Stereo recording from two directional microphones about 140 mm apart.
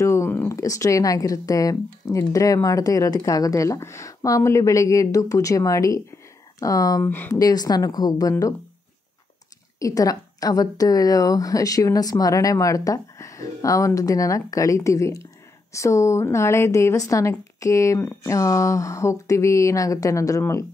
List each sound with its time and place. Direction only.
0.0 s speech: 20° left (ahead or behind)
7.1 s speech: 15° left (ahead or behind)
7.3 s speech: 25° left (ahead or behind)
9.8 s speech: 25° left (ahead or behind)